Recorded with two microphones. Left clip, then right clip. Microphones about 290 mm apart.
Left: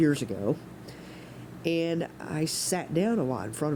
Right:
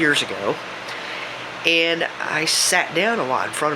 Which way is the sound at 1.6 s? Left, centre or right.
Left.